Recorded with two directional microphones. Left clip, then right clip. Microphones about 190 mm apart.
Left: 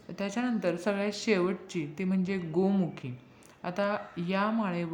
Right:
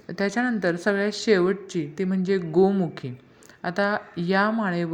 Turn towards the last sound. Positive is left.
turn(degrees=-20)  # may be behind; listen again after turning